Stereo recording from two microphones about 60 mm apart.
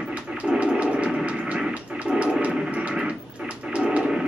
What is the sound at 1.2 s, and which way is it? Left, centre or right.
Music, centre.